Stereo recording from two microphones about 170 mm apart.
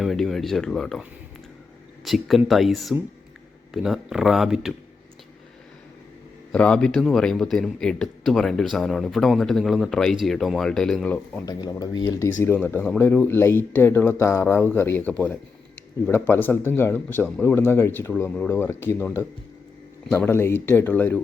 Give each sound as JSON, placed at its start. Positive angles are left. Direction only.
{"t": 0.0, "sound": "speech", "side_deg": 0}
{"t": 2.0, "sound": "a man's voice", "side_deg": 0}
{"t": 6.5, "sound": "a man's voice", "side_deg": 5}
{"t": 11.4, "sound": "speech", "side_deg": 25}